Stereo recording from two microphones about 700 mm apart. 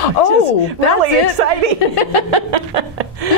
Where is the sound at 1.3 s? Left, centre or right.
Right.